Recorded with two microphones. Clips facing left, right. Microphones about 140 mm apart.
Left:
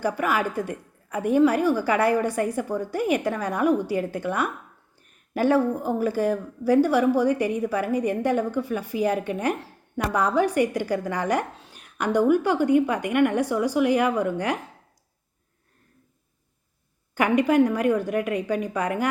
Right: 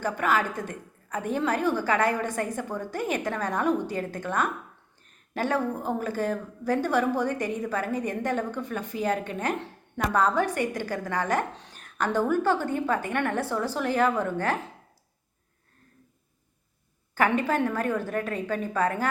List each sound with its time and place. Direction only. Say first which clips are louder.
0.0 s speech: left 2 dB; 10° left (ahead or behind)
17.2 s speech: left 5 dB; 15° left (ahead or behind)